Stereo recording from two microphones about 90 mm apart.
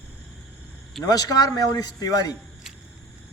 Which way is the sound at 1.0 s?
45° left (ahead or behind).